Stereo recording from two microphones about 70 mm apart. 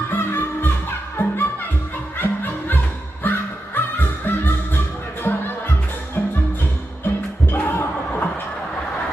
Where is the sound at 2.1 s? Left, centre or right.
Left.